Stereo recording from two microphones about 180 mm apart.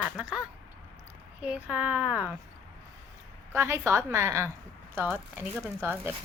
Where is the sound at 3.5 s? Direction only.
15° right (ahead or behind).